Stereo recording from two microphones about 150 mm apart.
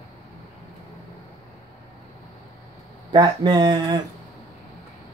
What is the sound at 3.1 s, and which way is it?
Speech, 30° right (ahead or behind).